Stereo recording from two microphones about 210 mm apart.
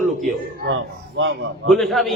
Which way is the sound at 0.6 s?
60° right (ahead or behind).